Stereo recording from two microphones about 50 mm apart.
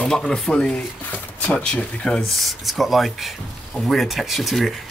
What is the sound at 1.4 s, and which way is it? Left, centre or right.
Speech, centre.